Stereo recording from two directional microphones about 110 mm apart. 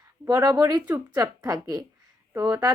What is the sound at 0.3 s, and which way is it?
Speech, 35° right (ahead or behind).